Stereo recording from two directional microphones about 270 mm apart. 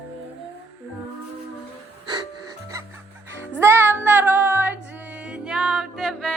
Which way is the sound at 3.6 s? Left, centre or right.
Centre.